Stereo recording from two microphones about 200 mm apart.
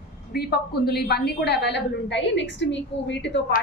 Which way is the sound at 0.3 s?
50° left (ahead or behind).